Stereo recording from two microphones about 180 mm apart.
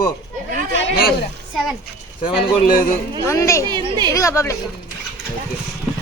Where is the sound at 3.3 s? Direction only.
15° left (ahead or behind).